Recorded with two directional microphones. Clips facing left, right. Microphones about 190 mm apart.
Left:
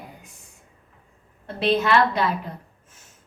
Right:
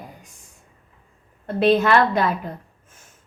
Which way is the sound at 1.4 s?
50° right (ahead or behind).